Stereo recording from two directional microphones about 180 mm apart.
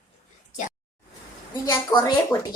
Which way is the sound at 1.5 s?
20° left (ahead or behind).